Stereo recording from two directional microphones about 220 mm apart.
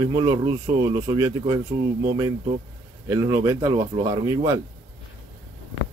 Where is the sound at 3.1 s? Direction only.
15° right (ahead or behind).